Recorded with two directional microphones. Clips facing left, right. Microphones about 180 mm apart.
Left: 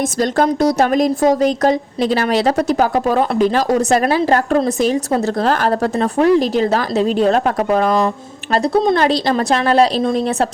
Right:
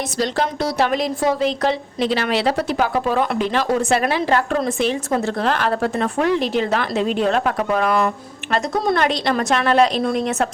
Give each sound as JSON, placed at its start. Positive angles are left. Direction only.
{"t": 0.2, "sound": "speech", "side_deg": 45}
{"t": 9.0, "sound": "speech", "side_deg": 35}
{"t": 10.0, "sound": "a woman's voice", "side_deg": 25}